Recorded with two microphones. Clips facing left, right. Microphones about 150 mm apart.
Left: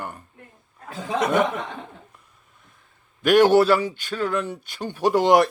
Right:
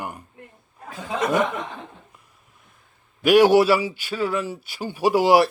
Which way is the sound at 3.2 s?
10° right (ahead or behind).